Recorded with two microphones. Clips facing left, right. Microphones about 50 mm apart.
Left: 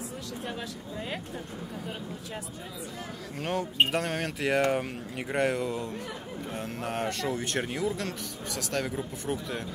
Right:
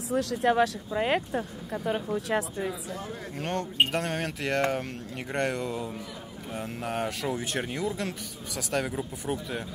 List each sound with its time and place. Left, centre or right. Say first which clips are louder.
0.1 s speech: right 12 dB; right
1.9 s speech: right 10 dB; right
3.3 s speech: even; centre